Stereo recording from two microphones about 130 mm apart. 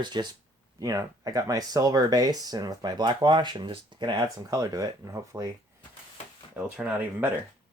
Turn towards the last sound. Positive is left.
turn(degrees=-15)  # may be behind; listen again after turning